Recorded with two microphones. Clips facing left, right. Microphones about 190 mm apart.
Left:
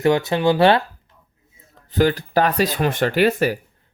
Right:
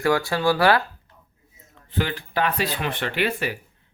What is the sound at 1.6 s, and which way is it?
Speech, 40° left (ahead or behind).